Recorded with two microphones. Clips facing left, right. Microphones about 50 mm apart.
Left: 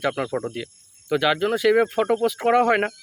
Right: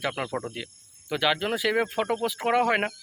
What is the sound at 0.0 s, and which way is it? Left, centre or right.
Cricket, centre.